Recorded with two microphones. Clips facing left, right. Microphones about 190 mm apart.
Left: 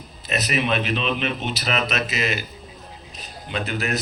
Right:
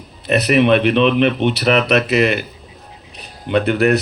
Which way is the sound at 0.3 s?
60° right (ahead or behind).